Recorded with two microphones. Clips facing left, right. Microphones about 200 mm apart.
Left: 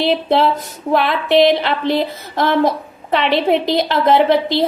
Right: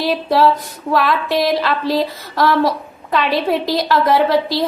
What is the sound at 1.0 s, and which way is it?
A woman's voice, 25° left (ahead or behind).